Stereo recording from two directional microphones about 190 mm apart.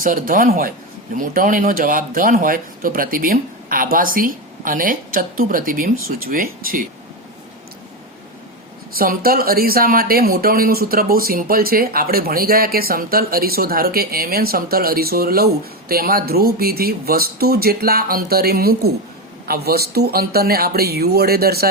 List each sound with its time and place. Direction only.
0.0 s speech: 45° right (ahead or behind)
8.9 s a man's voice: 50° right (ahead or behind)